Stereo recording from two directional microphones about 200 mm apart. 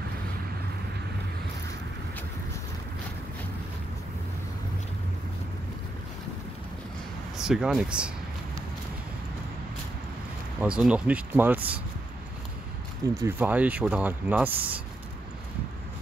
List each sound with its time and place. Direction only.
7.3 s speech: 5° right (ahead or behind)
10.6 s speech: 5° right (ahead or behind)
13.1 s speech: 10° right (ahead or behind)